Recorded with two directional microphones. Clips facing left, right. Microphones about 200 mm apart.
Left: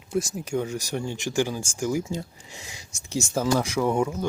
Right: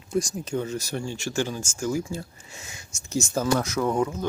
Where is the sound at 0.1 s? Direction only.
5° left (ahead or behind).